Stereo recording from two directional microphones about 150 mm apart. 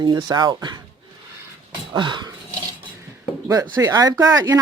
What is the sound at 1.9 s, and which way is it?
Speech, 30° right (ahead or behind).